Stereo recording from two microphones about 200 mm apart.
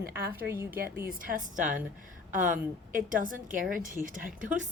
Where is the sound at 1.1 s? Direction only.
45° right (ahead or behind).